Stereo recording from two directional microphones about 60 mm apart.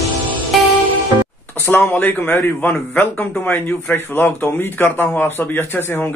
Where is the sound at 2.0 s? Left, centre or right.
Left.